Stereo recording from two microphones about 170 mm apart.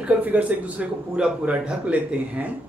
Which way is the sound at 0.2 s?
10° right (ahead or behind).